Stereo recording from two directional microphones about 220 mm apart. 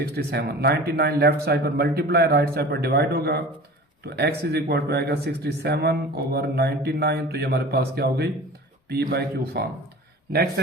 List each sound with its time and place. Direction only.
0.0 s speech: 50° right (ahead or behind)